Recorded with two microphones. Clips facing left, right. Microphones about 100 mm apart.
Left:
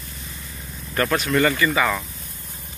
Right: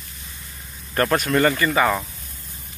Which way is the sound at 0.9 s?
45° right (ahead or behind).